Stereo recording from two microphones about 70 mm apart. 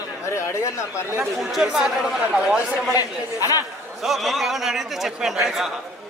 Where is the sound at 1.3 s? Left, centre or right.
Centre.